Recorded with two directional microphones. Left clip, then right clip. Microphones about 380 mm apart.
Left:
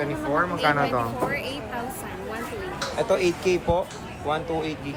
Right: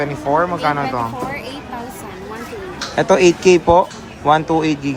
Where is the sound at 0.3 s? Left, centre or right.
Centre.